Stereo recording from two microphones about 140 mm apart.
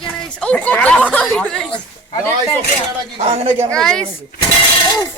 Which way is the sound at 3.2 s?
45° right (ahead or behind).